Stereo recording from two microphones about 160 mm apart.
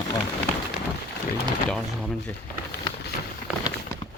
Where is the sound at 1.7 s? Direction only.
5° left (ahead or behind).